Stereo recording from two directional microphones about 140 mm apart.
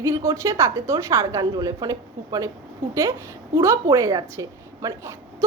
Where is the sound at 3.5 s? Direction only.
20° right (ahead or behind).